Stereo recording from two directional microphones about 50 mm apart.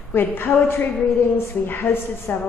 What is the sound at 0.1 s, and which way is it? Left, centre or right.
A woman's voice, left.